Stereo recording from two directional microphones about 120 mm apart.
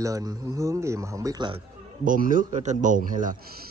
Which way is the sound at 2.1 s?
90° right.